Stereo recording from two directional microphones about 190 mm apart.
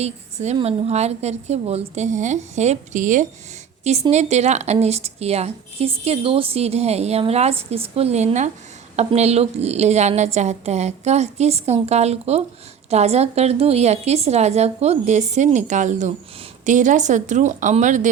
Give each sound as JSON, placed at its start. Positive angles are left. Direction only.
{"t": 0.0, "sound": "speech", "side_deg": -35}